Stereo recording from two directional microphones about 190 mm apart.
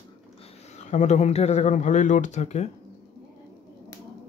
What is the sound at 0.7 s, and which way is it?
Speech, 40° left (ahead or behind).